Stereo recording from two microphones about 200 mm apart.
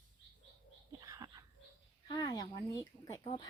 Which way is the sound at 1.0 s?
20° right (ahead or behind).